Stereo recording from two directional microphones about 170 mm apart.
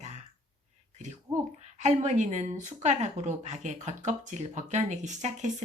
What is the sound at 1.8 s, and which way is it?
Speech, 45° right (ahead or behind).